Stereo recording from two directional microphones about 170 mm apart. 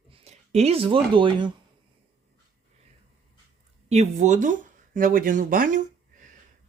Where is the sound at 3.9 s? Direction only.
40° right (ahead or behind).